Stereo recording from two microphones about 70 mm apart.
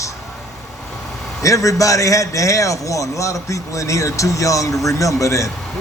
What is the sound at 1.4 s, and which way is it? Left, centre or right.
A man's voice, left.